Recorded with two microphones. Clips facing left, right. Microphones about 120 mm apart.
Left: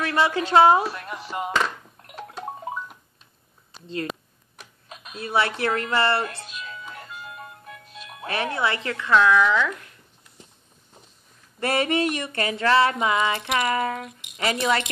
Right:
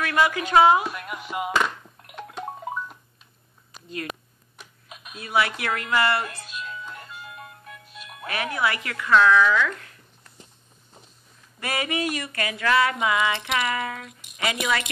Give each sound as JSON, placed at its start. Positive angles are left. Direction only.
{"t": 0.0, "sound": "speech", "side_deg": 30}
{"t": 1.2, "sound": "music", "side_deg": -5}
{"t": 3.8, "sound": "speech", "side_deg": 30}
{"t": 7.9, "sound": "music", "side_deg": -5}
{"t": 8.3, "sound": "speech", "side_deg": 30}
{"t": 11.6, "sound": "speech", "side_deg": 35}